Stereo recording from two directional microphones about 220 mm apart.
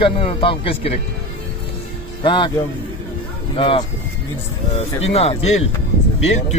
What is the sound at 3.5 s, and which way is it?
Speech, 25° left (ahead or behind).